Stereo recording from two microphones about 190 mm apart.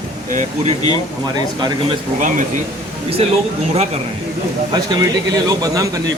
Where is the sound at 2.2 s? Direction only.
40° right (ahead or behind).